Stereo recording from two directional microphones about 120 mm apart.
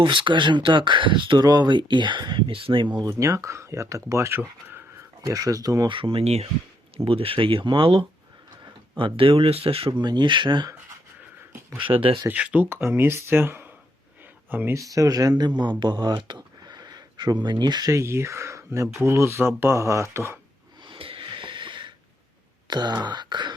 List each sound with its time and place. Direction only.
0.0 s speech: 40° right (ahead or behind)
3.1 s speech: 25° right (ahead or behind)
5.2 s speech: 30° right (ahead or behind)
5.9 s speech: 45° right (ahead or behind)
10.0 s speech: 40° right (ahead or behind)
11.8 s speech: 45° right (ahead or behind)
12.3 s speech: 10° right (ahead or behind)
20.8 s a sound: 45° right (ahead or behind)
22.6 s speech: 35° right (ahead or behind)